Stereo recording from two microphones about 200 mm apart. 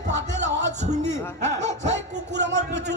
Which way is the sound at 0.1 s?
35° right (ahead or behind).